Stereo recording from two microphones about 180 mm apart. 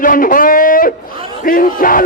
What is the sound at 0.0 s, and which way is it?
Music, 50° left (ahead or behind).